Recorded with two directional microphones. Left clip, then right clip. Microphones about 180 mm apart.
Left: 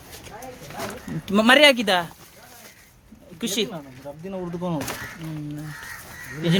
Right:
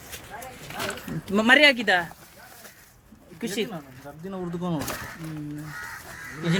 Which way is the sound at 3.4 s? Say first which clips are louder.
Left 4 dB; 25° left (ahead or behind).